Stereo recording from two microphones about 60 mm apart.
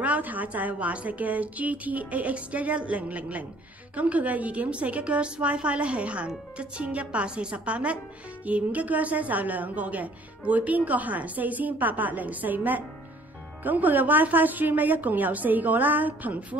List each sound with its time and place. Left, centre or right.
0.0 s a woman's voice: right